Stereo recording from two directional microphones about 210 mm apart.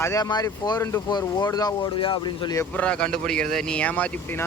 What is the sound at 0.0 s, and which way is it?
Speech, 15° left (ahead or behind).